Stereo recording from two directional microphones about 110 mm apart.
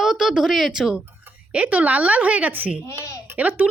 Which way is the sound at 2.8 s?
30° left (ahead or behind).